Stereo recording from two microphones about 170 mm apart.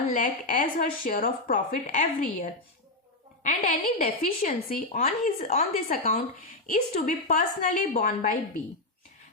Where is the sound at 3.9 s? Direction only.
55° left (ahead or behind).